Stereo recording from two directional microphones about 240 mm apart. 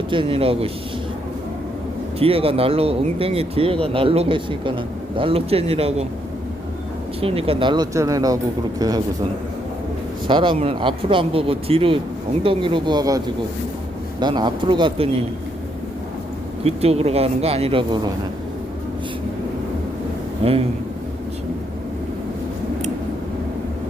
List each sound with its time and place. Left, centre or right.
0.1 s speech: right
2.1 s speech: right
7.2 s speech: right
10.2 s speech: centre
16.6 s speech: right
20.4 s speech: right